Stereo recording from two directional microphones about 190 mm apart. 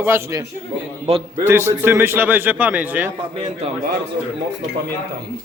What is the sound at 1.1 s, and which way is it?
Speech, 35° right (ahead or behind).